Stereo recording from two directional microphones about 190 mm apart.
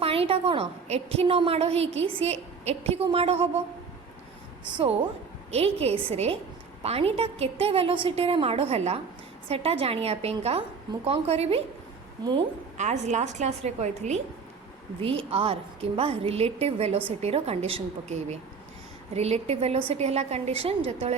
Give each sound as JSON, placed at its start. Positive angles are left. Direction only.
{"t": 0.0, "sound": "a woman's voice", "side_deg": -30}
{"t": 4.7, "sound": "a woman's voice", "side_deg": -30}
{"t": 12.7, "sound": "a woman's voice", "side_deg": -35}